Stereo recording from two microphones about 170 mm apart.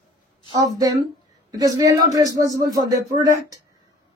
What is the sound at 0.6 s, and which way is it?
Speech, 20° right (ahead or behind).